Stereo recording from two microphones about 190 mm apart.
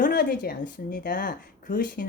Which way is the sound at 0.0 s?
55° left (ahead or behind).